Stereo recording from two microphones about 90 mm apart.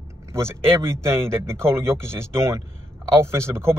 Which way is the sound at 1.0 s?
30° right (ahead or behind).